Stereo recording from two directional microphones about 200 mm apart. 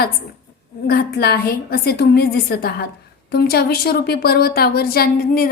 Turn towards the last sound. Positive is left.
turn(degrees=50)  # may be behind; listen again after turning